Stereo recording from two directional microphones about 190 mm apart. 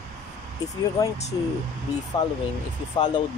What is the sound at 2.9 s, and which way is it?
Speech, 20° left (ahead or behind).